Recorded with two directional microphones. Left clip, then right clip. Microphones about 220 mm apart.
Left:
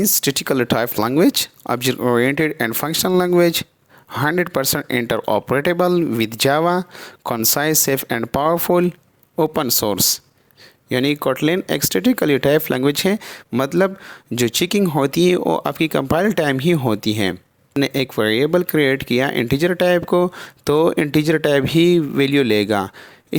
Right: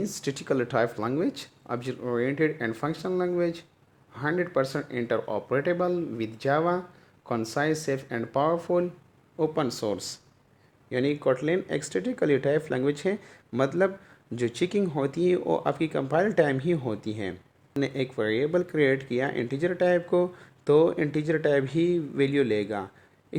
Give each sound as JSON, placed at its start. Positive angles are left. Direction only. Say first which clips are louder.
{"t": 0.0, "sound": "speech", "louder": "left 13 dB", "side_deg": 40}